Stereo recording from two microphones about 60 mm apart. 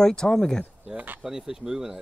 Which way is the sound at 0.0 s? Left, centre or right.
Centre.